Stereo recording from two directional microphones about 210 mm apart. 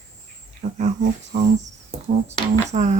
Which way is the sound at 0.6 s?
35° right (ahead or behind).